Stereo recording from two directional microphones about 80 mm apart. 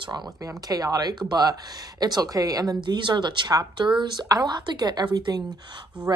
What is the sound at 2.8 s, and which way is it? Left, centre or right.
Speech, right.